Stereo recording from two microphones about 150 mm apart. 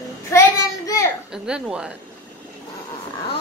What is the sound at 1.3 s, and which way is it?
Speech, 5° right (ahead or behind).